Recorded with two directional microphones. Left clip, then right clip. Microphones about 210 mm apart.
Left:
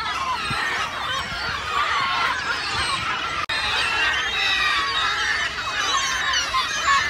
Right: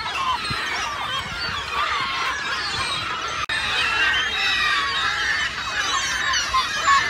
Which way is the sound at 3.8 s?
45° left (ahead or behind).